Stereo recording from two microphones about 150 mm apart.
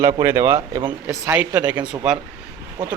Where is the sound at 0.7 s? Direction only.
30° right (ahead or behind).